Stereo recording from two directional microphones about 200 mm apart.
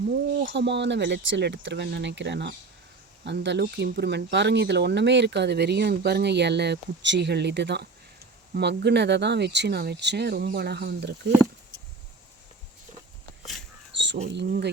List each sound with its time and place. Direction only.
0.3 s speech: 60° right (ahead or behind)
13.4 s a sound: centre (ahead or behind)
14.3 s speech: 55° right (ahead or behind)